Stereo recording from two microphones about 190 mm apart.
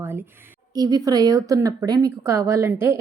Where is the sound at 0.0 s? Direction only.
10° right (ahead or behind).